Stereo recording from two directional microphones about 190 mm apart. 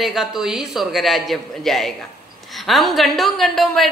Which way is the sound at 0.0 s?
Centre (ahead or behind).